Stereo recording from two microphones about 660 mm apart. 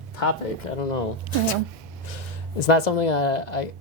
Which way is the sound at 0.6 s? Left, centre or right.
Left.